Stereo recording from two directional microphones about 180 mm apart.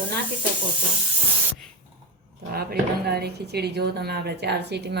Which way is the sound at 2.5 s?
60° right (ahead or behind).